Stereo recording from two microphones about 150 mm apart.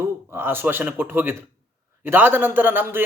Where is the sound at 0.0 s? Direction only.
15° right (ahead or behind).